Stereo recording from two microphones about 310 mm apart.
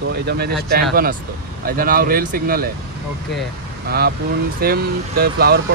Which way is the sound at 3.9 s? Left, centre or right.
Right.